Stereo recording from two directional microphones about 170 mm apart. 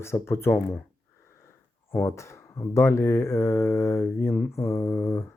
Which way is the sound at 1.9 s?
15° left (ahead or behind).